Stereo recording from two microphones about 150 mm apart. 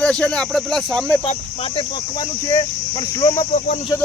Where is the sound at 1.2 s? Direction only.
40° left (ahead or behind).